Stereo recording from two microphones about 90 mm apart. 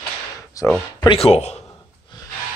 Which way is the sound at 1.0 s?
70° left (ahead or behind).